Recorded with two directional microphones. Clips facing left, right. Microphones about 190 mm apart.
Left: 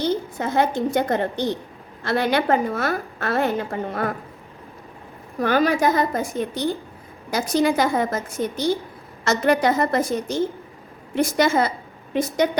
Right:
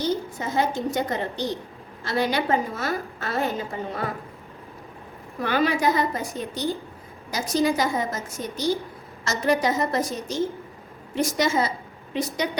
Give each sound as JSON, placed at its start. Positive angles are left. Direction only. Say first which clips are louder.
{"t": 0.0, "sound": "a woman's voice", "louder": "left 3 dB", "side_deg": 60}
{"t": 5.4, "sound": "a woman's voice", "louder": "left 4 dB", "side_deg": 45}